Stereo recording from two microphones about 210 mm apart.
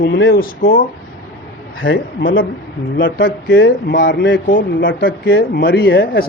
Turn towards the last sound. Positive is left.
turn(degrees=50)  # may be behind; listen again after turning